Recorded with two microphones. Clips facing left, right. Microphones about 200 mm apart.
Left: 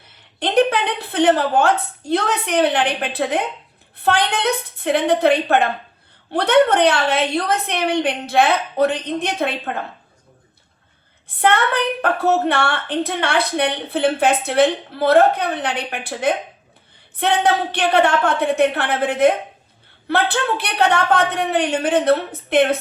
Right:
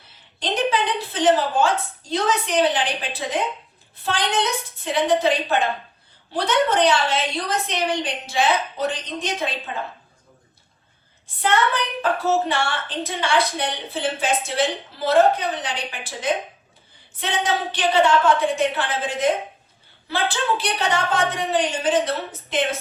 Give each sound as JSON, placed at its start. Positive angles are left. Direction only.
{"t": 0.3, "sound": "a woman's voice", "side_deg": 60}
{"t": 11.3, "sound": "a woman's voice", "side_deg": 60}